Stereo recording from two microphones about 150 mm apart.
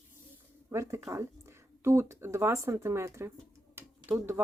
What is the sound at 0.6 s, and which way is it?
Speech, 20° right (ahead or behind).